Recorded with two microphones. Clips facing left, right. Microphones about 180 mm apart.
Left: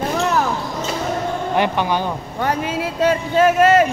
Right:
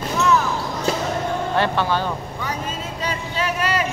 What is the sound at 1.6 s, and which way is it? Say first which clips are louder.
Speech: left 2 dB; 15° left (ahead or behind).